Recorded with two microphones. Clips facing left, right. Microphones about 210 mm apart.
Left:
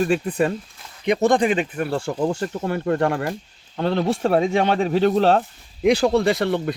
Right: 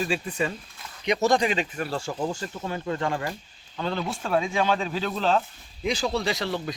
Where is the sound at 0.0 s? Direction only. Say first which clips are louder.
Left 7 dB; 55° left (ahead or behind).